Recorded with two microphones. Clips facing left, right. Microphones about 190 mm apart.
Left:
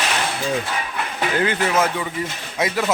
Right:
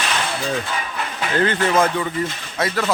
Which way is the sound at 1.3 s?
10° left (ahead or behind).